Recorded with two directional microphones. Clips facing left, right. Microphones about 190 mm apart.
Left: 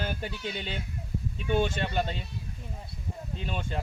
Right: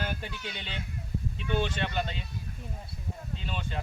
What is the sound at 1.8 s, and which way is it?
Speech, 35° left (ahead or behind).